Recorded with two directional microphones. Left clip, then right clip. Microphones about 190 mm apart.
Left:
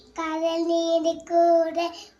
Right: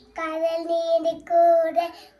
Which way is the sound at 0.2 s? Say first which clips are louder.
Even; 10° right (ahead or behind).